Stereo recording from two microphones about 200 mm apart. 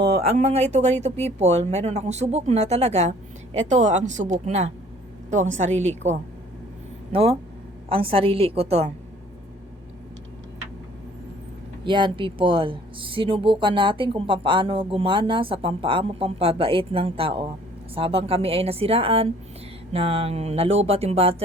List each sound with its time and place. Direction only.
0.2 s speech: 30° right (ahead or behind)
11.9 s speech: 25° right (ahead or behind)